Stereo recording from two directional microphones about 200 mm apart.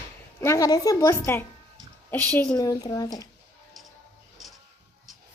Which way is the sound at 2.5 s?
20° left (ahead or behind).